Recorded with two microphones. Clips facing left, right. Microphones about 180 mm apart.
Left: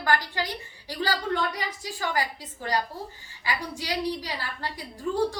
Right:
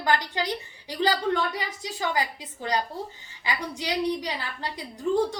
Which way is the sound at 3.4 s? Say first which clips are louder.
Right 1 dB; 20° right (ahead or behind).